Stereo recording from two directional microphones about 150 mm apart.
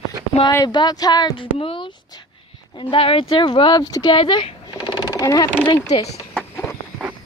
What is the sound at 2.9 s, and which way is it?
Speech, 35° left (ahead or behind).